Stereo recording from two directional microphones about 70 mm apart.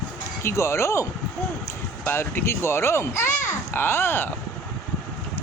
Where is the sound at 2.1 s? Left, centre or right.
Left.